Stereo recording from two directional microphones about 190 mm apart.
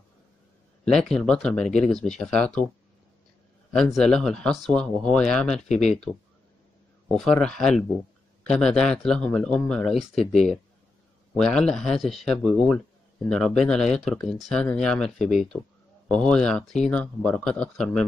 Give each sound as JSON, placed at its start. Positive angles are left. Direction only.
{"t": 0.8, "sound": "a man's voice", "side_deg": 0}
{"t": 3.7, "sound": "a man's voice", "side_deg": 0}
{"t": 5.7, "sound": "speech", "side_deg": 35}
{"t": 7.2, "sound": "a man's voice", "side_deg": 5}
{"t": 11.3, "sound": "a man's voice", "side_deg": 5}
{"t": 15.1, "sound": "speech", "side_deg": 40}
{"t": 16.1, "sound": "a man's voice", "side_deg": 5}